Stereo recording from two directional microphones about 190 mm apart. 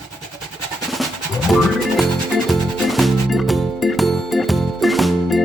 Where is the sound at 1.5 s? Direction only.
Centre (ahead or behind).